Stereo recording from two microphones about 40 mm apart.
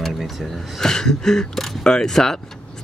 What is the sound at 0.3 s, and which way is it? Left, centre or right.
Speech, centre.